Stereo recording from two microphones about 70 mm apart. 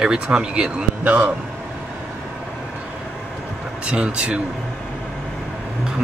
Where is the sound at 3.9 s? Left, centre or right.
Centre.